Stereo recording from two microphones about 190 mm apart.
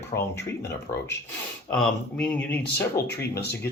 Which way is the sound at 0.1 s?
40° left (ahead or behind).